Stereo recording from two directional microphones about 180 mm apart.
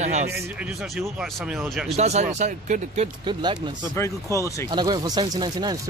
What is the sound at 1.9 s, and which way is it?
Speech, 40° right (ahead or behind).